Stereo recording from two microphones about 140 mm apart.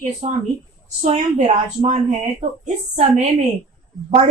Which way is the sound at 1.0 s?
50° right (ahead or behind).